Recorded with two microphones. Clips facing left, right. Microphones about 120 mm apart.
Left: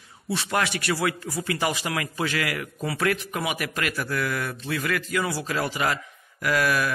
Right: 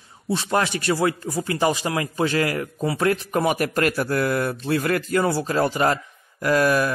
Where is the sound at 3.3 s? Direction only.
40° right (ahead or behind).